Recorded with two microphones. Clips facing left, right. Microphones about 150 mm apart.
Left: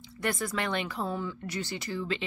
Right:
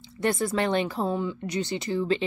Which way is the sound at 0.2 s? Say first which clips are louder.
Right 6 dB; 25° right (ahead or behind).